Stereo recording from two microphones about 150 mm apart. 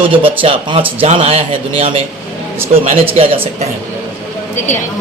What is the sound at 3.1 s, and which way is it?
Speech, 40° right (ahead or behind).